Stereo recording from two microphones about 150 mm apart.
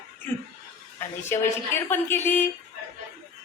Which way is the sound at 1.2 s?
15° left (ahead or behind).